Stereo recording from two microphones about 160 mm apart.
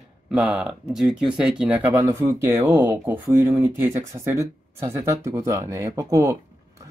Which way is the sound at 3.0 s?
15° right (ahead or behind).